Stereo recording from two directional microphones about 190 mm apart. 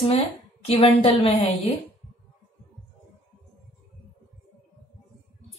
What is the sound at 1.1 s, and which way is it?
Speech, 30° left (ahead or behind).